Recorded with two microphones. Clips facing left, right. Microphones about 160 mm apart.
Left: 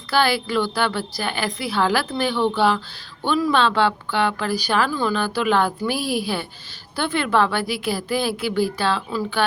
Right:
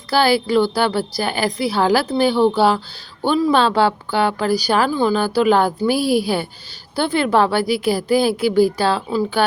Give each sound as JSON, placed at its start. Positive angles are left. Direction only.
{"t": 0.1, "sound": "a woman's voice", "side_deg": -35}